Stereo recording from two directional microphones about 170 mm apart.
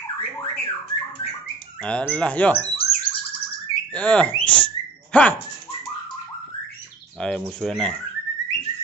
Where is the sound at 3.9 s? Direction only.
5° left (ahead or behind).